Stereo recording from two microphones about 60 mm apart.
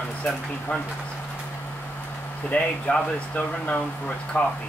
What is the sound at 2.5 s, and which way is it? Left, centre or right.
Speech, left.